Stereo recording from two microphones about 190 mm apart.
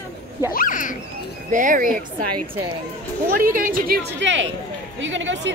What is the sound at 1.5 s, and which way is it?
Speech, 45° right (ahead or behind).